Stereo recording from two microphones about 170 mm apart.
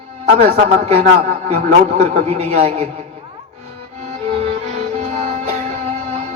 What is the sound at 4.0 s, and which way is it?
Music, 40° right (ahead or behind).